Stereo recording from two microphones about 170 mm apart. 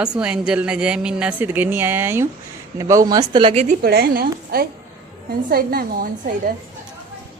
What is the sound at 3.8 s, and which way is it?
A woman's voice, 65° right (ahead or behind).